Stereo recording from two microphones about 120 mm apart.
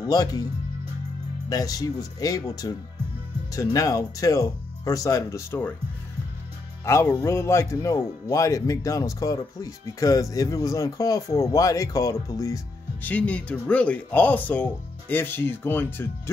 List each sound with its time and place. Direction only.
0.1 s speech: 30° left (ahead or behind)
1.5 s speech: 30° left (ahead or behind)
6.8 s speech: 20° left (ahead or behind)
13.0 s speech: 10° left (ahead or behind)